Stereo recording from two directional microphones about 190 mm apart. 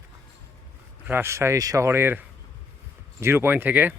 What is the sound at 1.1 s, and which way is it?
Speech, 10° right (ahead or behind).